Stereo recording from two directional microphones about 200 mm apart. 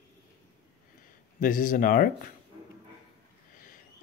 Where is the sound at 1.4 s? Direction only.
45° left (ahead or behind).